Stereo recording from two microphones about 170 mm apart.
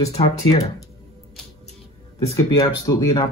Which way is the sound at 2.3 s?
20° left (ahead or behind).